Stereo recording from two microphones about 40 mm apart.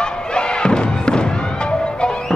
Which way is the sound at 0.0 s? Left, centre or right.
Left.